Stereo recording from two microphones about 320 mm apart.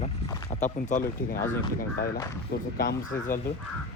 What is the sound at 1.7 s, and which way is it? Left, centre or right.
Speech, left.